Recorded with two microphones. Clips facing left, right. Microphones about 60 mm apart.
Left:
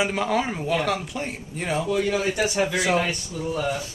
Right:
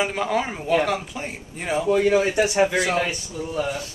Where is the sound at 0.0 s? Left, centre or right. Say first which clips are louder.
Even; centre.